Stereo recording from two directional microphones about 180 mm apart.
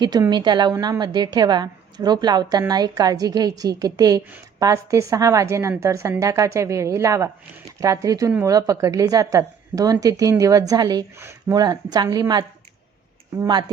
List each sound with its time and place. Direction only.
0.0 s a woman's voice: 25° right (ahead or behind)